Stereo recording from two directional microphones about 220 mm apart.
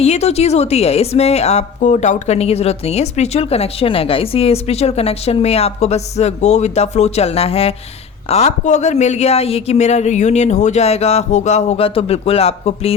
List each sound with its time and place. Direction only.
0.0 s a woman's voice: 30° left (ahead or behind)